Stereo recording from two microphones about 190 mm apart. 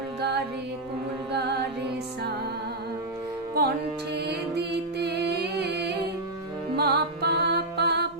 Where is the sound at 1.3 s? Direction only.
60° right (ahead or behind).